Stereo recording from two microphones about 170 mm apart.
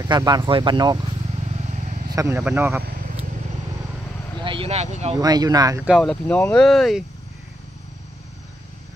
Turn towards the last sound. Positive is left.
turn(degrees=0)  # may be behind; listen again after turning